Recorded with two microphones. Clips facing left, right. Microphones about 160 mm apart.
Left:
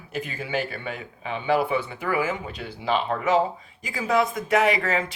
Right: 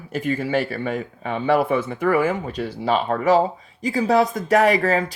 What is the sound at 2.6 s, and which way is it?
Speech, 40° right (ahead or behind).